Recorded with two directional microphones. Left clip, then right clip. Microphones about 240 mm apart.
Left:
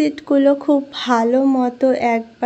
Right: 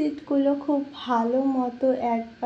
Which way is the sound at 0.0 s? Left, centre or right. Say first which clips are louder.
Left 9 dB; left.